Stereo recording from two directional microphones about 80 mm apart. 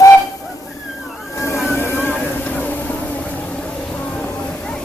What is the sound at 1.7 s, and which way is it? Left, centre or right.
Vehicle, left.